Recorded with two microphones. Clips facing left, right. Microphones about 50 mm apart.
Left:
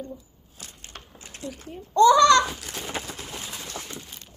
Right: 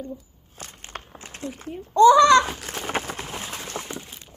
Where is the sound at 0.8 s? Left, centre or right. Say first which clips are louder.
Right 8 dB; right.